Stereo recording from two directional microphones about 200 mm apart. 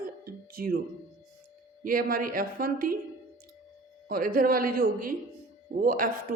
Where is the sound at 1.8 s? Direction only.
45° right (ahead or behind).